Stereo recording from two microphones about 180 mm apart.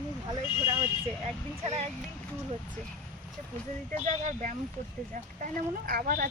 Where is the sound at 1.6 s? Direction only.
35° right (ahead or behind).